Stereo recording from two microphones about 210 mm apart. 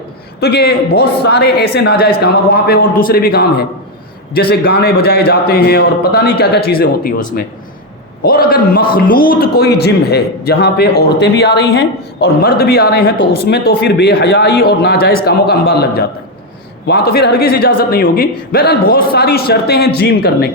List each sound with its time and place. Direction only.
0.3 s a man's voice: 50° left (ahead or behind)